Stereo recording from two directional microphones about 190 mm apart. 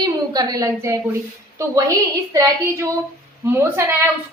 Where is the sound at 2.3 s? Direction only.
15° right (ahead or behind).